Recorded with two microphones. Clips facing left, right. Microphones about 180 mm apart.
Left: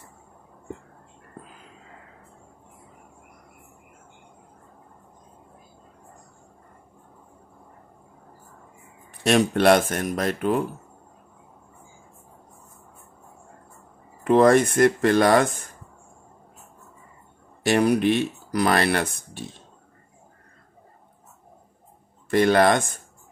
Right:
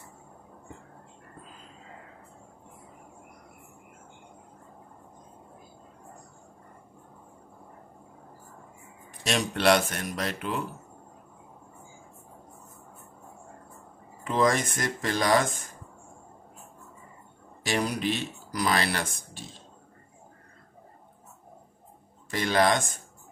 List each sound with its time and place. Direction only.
9.2 s speech: 55° left (ahead or behind)
14.2 s speech: 60° left (ahead or behind)
17.6 s speech: 60° left (ahead or behind)
22.3 s speech: 55° left (ahead or behind)